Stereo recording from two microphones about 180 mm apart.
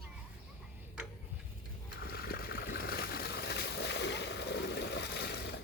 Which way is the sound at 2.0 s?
60° left (ahead or behind).